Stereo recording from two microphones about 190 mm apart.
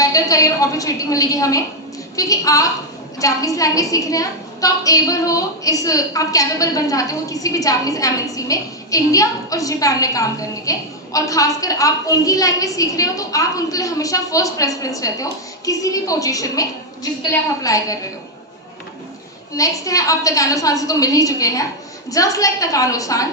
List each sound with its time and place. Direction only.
0.0 s a woman's voice: 15° left (ahead or behind)
19.5 s a woman's voice: 15° left (ahead or behind)